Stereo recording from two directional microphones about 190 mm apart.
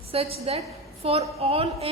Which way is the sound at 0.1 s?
30° right (ahead or behind).